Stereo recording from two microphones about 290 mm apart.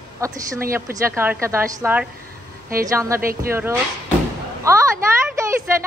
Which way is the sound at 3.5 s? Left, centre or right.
Centre.